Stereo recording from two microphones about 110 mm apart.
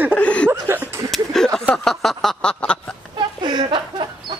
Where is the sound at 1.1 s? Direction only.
5° left (ahead or behind).